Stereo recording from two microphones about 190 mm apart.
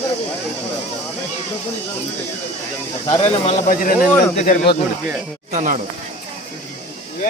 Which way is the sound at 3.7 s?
50° left (ahead or behind).